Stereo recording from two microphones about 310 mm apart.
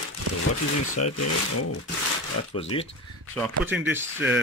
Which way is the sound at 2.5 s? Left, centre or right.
Centre.